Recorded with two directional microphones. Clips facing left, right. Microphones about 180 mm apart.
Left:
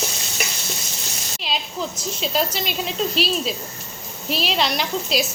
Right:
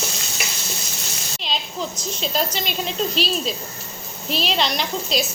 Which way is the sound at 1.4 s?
5° left (ahead or behind).